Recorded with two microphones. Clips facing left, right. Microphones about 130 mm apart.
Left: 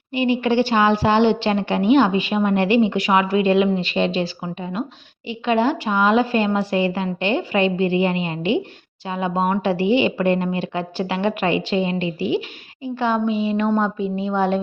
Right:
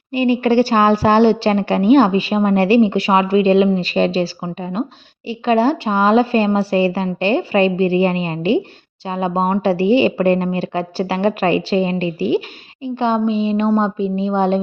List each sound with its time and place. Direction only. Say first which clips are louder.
0.1 s a woman's voice: right 4 dB; 40° right (ahead or behind)
12.8 s a woman's voice: right 3 dB; 25° right (ahead or behind)